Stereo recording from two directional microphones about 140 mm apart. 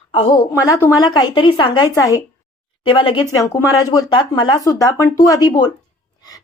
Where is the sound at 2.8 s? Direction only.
35° left (ahead or behind).